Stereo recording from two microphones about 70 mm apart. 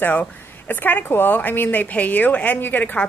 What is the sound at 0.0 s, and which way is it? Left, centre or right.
Speech, left.